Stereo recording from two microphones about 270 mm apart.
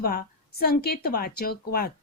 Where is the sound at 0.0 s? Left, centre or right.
Left.